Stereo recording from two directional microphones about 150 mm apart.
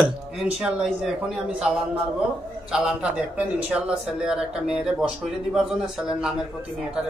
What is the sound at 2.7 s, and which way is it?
A man's voice, 5° right (ahead or behind).